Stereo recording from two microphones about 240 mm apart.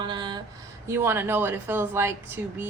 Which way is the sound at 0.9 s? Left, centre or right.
Centre.